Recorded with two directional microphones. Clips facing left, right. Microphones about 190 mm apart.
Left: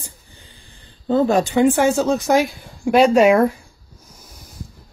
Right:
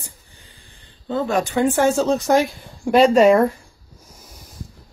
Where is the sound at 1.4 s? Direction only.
15° left (ahead or behind).